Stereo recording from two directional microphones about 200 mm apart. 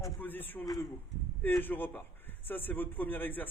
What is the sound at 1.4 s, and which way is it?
A man's voice, 10° left (ahead or behind).